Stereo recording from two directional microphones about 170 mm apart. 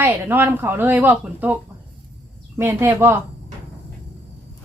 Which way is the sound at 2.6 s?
15° right (ahead or behind).